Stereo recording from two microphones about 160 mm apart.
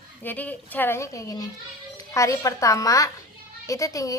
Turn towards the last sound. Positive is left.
turn(degrees=20)  # may be behind; listen again after turning